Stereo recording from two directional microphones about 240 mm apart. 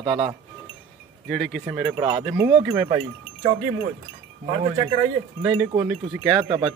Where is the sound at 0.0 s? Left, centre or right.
Right.